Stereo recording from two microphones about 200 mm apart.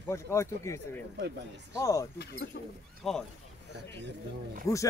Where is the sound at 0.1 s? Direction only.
15° left (ahead or behind).